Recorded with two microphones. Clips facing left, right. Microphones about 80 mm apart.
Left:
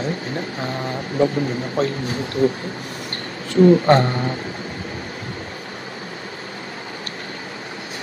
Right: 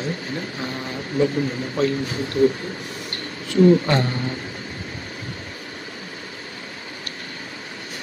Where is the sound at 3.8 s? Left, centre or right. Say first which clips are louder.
Left 6 dB; left.